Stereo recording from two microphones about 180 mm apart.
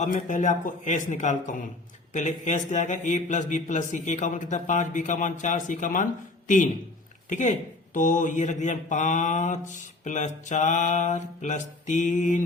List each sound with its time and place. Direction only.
0.0 s mantra: 45° left (ahead or behind)
7.3 s speech: 45° left (ahead or behind)
7.9 s mantra: 45° left (ahead or behind)